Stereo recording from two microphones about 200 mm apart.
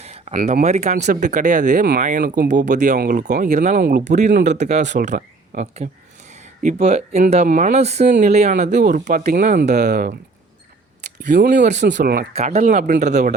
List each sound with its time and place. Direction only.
0.0 s speech: 30° right (ahead or behind)
11.8 s speech: 60° right (ahead or behind)
12.3 s speech: 35° right (ahead or behind)